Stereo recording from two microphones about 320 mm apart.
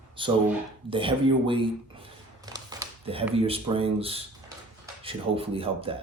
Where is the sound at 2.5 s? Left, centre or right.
Centre.